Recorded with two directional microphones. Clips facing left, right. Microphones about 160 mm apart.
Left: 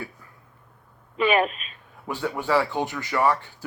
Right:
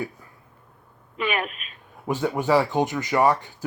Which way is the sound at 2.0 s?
20° right (ahead or behind).